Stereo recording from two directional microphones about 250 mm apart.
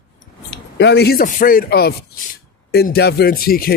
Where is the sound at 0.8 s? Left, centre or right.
Left.